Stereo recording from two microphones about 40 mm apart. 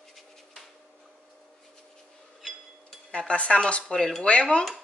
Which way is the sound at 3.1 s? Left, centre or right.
Left.